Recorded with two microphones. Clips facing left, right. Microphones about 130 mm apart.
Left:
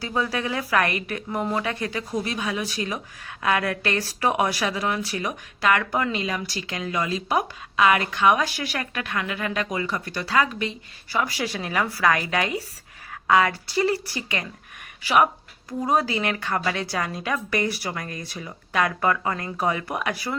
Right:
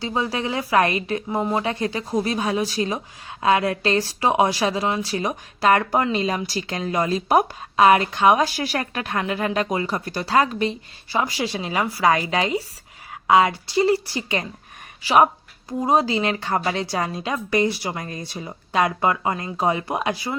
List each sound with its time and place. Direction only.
0.0 s a woman's voice: 25° right (ahead or behind)